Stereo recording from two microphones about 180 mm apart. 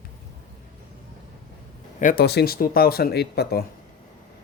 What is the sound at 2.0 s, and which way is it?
A man's voice, 55° left (ahead or behind).